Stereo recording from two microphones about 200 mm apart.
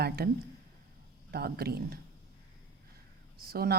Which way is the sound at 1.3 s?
50° right (ahead or behind).